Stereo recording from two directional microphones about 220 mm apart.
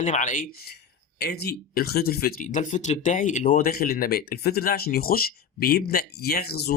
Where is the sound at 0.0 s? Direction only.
35° left (ahead or behind).